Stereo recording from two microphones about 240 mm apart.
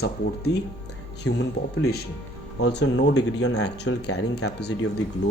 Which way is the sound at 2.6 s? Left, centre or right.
Left.